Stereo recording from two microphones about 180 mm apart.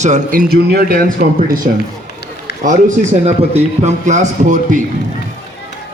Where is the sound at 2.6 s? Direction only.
40° right (ahead or behind).